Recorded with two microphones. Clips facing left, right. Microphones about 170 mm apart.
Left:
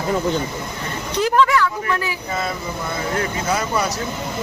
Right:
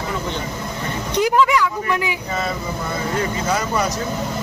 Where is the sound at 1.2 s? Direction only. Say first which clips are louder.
Even; 15° right (ahead or behind).